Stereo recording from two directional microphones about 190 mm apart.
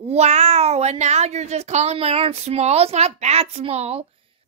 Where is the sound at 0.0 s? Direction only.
35° right (ahead or behind).